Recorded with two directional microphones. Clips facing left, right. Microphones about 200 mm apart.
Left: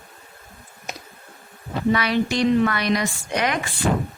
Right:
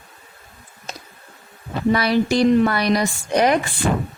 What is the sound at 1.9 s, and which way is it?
A woman's voice, 35° right (ahead or behind).